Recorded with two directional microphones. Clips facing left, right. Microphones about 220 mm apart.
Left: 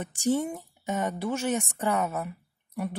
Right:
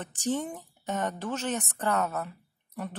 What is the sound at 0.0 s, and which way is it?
A woman's voice, 10° left (ahead or behind).